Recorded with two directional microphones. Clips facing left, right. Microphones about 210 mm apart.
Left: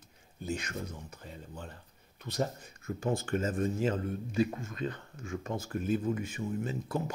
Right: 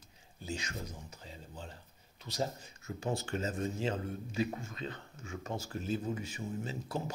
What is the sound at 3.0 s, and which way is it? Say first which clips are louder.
Speech: left 4 dB; 50° left (ahead or behind).